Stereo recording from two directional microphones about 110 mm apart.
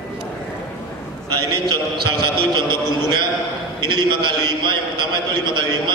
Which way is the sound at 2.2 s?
45° right (ahead or behind).